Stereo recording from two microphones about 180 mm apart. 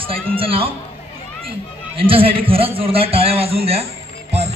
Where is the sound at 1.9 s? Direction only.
30° right (ahead or behind).